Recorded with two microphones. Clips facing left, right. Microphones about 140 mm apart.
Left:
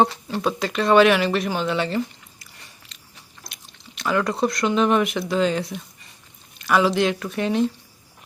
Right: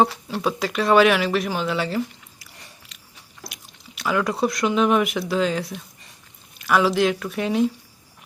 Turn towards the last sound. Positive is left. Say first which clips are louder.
# even
turn(degrees=-5)  # may be behind; listen again after turning